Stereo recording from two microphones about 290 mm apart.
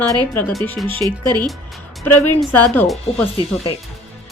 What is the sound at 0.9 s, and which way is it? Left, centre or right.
Speech, centre.